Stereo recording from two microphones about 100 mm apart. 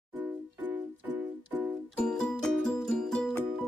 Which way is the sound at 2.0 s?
5° left (ahead or behind).